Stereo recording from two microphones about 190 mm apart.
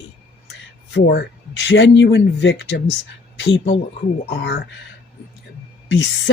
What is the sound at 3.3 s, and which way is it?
Speech, 60° left (ahead or behind).